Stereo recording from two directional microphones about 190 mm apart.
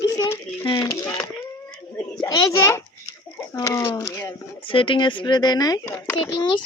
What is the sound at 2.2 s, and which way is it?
A child's voice, 20° left (ahead or behind).